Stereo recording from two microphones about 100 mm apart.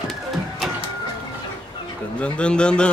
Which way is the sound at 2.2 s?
10° left (ahead or behind).